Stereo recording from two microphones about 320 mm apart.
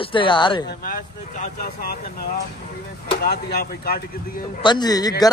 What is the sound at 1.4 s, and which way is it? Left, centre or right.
Speech, left.